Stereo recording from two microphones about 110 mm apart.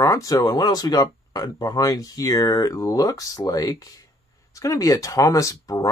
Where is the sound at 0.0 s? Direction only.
30° left (ahead or behind).